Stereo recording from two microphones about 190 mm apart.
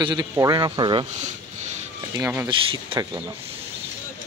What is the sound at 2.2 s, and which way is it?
Speech, 10° right (ahead or behind).